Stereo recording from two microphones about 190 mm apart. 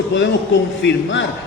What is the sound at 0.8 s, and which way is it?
Speech, 75° left (ahead or behind).